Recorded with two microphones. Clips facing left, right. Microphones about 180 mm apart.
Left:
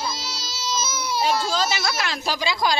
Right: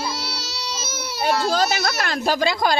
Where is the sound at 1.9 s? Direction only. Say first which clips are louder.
Right 5 dB; 50° right (ahead or behind).